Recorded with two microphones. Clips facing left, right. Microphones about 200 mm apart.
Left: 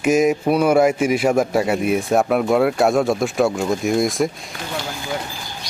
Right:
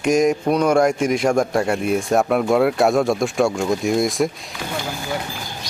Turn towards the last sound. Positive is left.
turn(degrees=0)  # may be behind; listen again after turning